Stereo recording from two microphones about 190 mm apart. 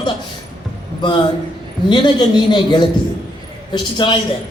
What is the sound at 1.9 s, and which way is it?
A man's voice, 25° left (ahead or behind).